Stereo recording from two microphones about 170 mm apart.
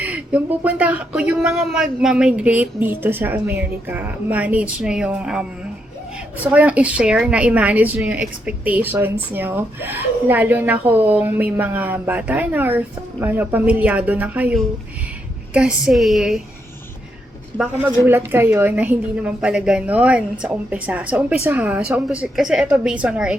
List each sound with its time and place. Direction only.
0.0 s a woman's voice: 10° right (ahead or behind)
18.0 s a woman's voice: 10° right (ahead or behind)